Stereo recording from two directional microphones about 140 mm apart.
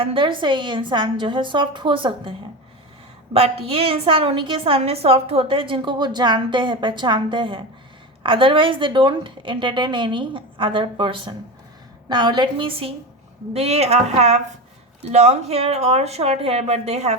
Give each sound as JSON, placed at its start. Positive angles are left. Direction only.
{"t": 0.0, "sound": "a woman's voice", "side_deg": -40}
{"t": 3.3, "sound": "a woman's voice", "side_deg": -40}